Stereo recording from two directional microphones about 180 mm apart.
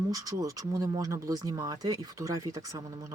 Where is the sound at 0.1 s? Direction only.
20° right (ahead or behind).